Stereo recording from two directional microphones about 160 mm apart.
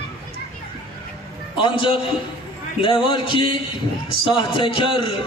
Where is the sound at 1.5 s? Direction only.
35° left (ahead or behind).